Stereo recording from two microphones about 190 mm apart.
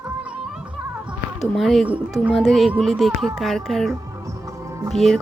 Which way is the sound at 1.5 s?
Centre (ahead or behind).